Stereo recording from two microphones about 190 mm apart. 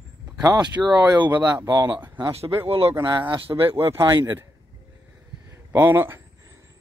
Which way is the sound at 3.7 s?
15° right (ahead or behind).